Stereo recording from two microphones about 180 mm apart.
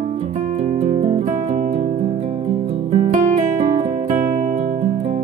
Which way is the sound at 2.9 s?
40° right (ahead or behind).